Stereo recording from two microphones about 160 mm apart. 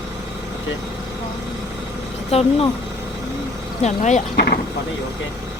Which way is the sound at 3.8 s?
45° left (ahead or behind).